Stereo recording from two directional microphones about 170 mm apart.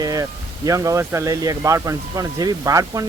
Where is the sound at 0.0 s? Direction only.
20° right (ahead or behind).